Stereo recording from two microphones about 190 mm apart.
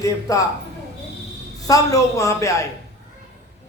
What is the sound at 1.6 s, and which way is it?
A man's voice, 20° left (ahead or behind).